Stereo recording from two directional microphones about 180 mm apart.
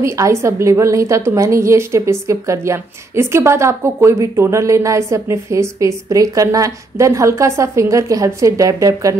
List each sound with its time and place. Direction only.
0.0 s a woman's voice: 15° right (ahead or behind)